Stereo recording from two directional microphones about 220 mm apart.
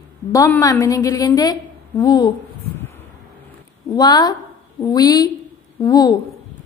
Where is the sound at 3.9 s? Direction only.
20° left (ahead or behind).